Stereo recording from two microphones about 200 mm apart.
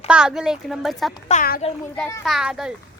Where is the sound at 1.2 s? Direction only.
40° left (ahead or behind).